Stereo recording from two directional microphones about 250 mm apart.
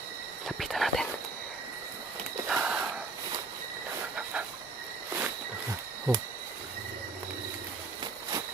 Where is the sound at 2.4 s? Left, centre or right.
Centre.